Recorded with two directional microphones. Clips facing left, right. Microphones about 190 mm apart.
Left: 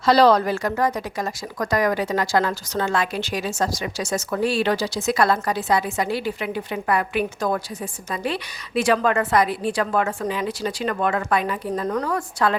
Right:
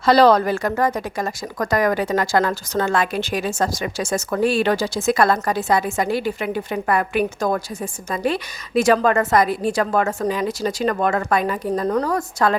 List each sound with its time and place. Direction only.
0.0 s a woman's voice: 55° right (ahead or behind)